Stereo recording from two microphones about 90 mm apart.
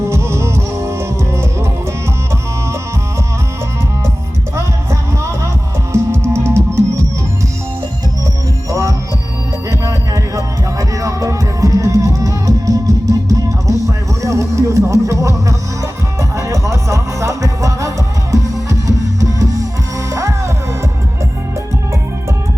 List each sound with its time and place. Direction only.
0.1 s music: 30° right (ahead or behind)
4.5 s music: 30° right (ahead or behind)
8.7 s music: 35° right (ahead or behind)